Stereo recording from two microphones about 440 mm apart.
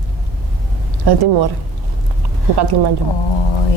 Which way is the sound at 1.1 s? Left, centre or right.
Right.